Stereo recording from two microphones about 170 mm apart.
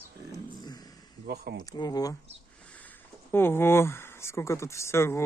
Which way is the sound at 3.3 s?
15° left (ahead or behind).